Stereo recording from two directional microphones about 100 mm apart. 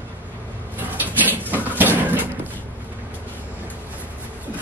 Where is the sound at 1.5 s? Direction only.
20° right (ahead or behind).